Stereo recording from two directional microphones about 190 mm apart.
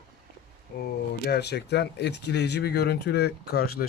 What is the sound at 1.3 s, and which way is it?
Speech, 60° left (ahead or behind).